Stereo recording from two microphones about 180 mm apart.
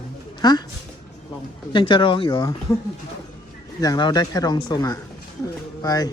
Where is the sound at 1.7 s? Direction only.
25° left (ahead or behind).